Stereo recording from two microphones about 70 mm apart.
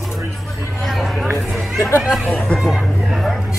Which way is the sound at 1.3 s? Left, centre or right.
Left.